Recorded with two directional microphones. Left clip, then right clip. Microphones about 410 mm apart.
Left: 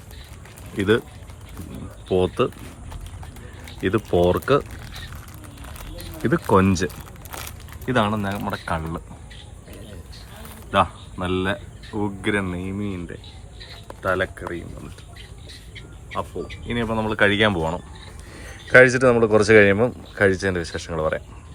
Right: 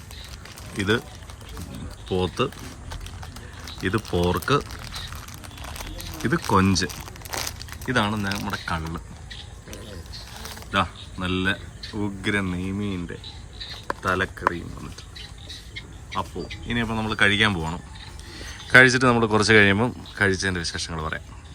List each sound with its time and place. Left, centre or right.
0.8 s speech: centre
2.1 s speech: centre
3.8 s speech: centre
5.6 s a sound: right
6.5 s speech: centre
7.3 s crumpling: right
7.9 s speech: centre
10.7 s speech: centre
16.6 s speech: centre